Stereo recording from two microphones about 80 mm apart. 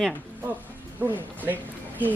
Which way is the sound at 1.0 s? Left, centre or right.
Right.